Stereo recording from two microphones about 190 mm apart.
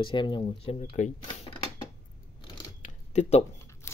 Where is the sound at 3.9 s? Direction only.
15° left (ahead or behind).